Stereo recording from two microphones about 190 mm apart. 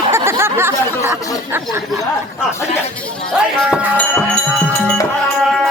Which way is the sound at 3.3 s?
5° right (ahead or behind).